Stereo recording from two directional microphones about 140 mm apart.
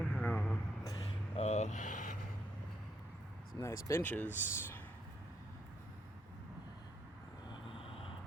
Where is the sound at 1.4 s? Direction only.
55° left (ahead or behind).